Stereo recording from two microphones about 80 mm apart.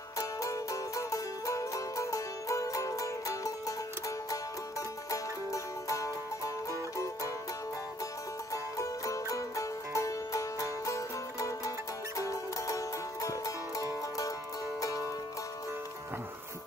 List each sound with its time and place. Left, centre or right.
0.2 s music: left
5.1 s music: left
8.7 s music: left